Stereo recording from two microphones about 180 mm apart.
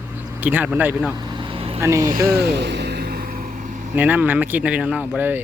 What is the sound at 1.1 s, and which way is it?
Vehicle, 25° right (ahead or behind).